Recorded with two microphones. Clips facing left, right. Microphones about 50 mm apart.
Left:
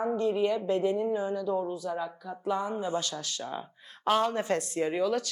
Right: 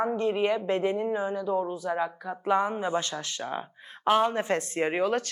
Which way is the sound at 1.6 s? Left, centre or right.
Right.